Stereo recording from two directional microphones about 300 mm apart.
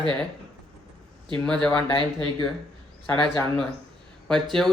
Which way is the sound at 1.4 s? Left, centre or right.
Centre.